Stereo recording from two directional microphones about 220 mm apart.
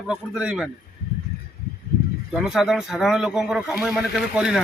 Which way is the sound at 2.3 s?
Centre (ahead or behind).